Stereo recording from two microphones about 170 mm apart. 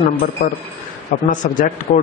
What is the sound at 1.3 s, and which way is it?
Speech, 50° left (ahead or behind).